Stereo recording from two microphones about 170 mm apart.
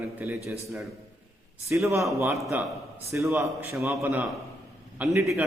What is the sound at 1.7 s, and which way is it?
A man's voice, 15° right (ahead or behind).